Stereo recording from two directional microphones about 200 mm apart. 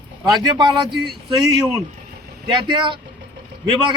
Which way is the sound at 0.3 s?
20° right (ahead or behind).